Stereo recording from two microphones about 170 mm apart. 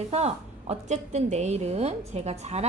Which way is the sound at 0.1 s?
40° right (ahead or behind).